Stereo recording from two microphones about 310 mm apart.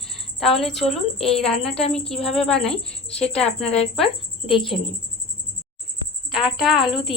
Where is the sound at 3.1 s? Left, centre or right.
Centre.